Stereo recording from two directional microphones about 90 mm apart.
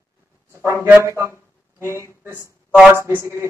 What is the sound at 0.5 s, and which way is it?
Speech, 30° right (ahead or behind).